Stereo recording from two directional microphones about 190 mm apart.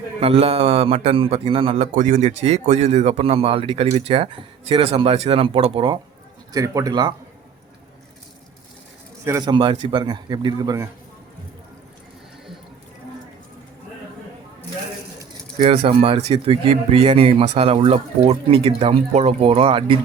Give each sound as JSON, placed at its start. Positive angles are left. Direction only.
{"t": 0.2, "sound": "a man's voice", "side_deg": -30}
{"t": 6.5, "sound": "a man's voice", "side_deg": -15}
{"t": 9.2, "sound": "a man's voice", "side_deg": -20}
{"t": 15.5, "sound": "a man's voice", "side_deg": -30}